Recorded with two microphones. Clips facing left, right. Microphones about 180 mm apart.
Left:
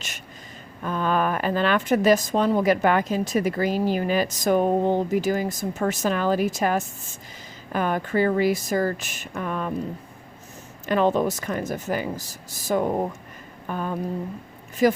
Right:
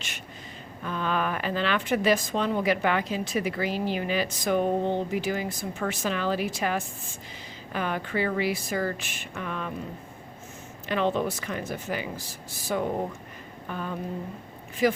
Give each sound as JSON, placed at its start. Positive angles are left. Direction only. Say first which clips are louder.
{"t": 0.9, "sound": "speech", "louder": "left 5 dB", "side_deg": 45}
{"t": 10.8, "sound": "speech", "louder": "left 5 dB", "side_deg": 45}
{"t": 13.7, "sound": "a sound", "louder": "left 5 dB", "side_deg": 45}
{"t": 14.8, "sound": "speech", "louder": "left 4 dB", "side_deg": 45}